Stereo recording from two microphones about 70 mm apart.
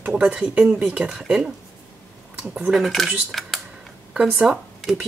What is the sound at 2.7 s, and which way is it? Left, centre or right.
Speech, centre.